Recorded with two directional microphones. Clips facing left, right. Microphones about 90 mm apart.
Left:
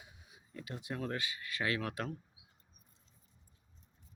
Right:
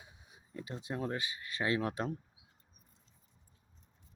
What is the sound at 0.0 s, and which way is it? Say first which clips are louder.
Speech: even; 25° right (ahead or behind).